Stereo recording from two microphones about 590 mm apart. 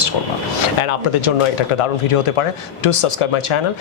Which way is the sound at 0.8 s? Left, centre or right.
Left.